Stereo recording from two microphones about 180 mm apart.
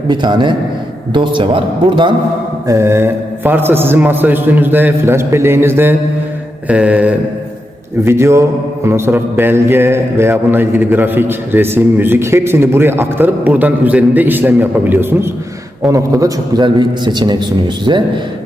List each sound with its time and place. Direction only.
0.1 s a man's voice: 25° right (ahead or behind)
2.6 s mantra: 15° right (ahead or behind)
15.8 s a man's voice: 20° right (ahead or behind)